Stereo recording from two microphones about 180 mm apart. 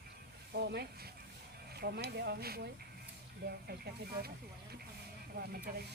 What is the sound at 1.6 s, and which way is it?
Speech, 65° right (ahead or behind).